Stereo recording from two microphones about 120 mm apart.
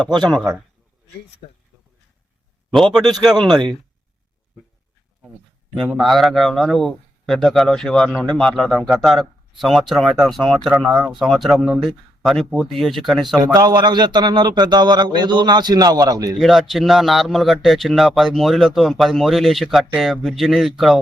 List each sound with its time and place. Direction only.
0.2 s speech: 5° left (ahead or behind)
1.4 s speech: 90° left
2.9 s speech: centre (ahead or behind)
5.8 s speech: centre (ahead or behind)
13.4 s a man's voice: 35° right (ahead or behind)
16.4 s speech: centre (ahead or behind)